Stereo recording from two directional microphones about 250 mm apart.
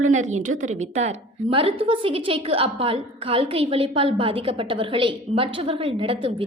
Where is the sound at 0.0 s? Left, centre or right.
Right.